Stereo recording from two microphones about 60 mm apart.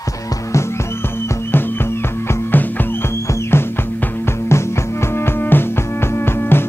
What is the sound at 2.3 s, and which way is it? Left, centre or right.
Music, left.